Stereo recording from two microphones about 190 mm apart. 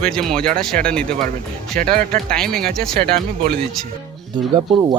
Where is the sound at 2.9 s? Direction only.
55° right (ahead or behind).